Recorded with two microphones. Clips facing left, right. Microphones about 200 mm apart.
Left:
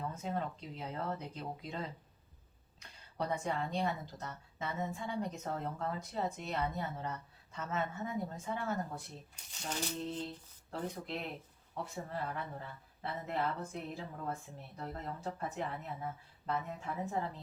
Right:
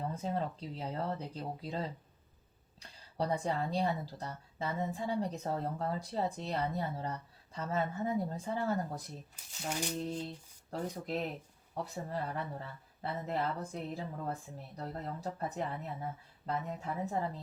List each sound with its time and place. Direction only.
0.1 s a woman's voice: 35° right (ahead or behind)
3.2 s a woman's voice: 35° right (ahead or behind)
9.3 s speech: 10° right (ahead or behind)
10.7 s a woman's voice: 40° right (ahead or behind)